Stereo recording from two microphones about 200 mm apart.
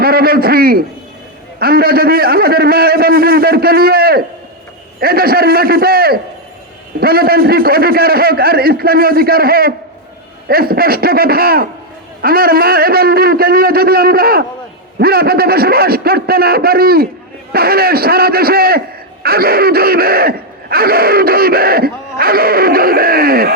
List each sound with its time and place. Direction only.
0.0 s speech: 50° right (ahead or behind)